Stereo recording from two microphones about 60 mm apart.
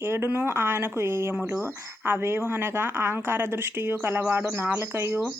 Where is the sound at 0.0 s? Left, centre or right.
Right.